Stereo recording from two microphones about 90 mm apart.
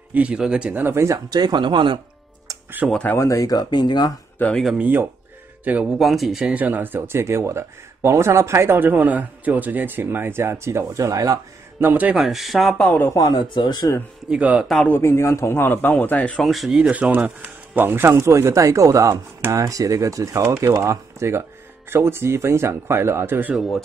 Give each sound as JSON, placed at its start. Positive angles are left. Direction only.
{"t": 0.1, "sound": "speech", "side_deg": -15}
{"t": 1.4, "sound": "a man's voice", "side_deg": -60}
{"t": 2.8, "sound": "speech", "side_deg": -10}
{"t": 3.2, "sound": "speech", "side_deg": 35}
{"t": 4.7, "sound": "speech", "side_deg": -20}
{"t": 5.9, "sound": "speech", "side_deg": 0}
{"t": 6.5, "sound": "speech", "side_deg": -20}
{"t": 11.8, "sound": "speech", "side_deg": -20}
{"t": 12.2, "sound": "speech", "side_deg": 0}
{"t": 13.1, "sound": "speech", "side_deg": 45}
{"t": 14.3, "sound": "speech", "side_deg": -15}
{"t": 14.9, "sound": "a man's voice", "side_deg": 30}
{"t": 16.3, "sound": "speech", "side_deg": 0}
{"t": 23.5, "sound": "speech", "side_deg": 0}